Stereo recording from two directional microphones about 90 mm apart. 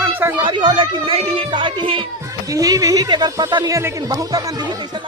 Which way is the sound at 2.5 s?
40° right (ahead or behind).